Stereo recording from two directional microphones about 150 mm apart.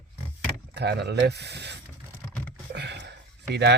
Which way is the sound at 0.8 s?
90° right.